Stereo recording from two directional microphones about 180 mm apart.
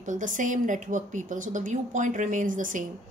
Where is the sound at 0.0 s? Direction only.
45° right (ahead or behind).